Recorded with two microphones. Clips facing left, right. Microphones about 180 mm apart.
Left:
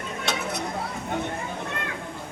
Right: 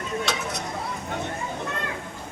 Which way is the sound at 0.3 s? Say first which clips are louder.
Left 4 dB; 55° left (ahead or behind).